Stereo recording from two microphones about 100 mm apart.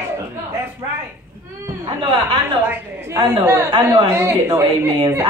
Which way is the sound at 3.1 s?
30° right (ahead or behind).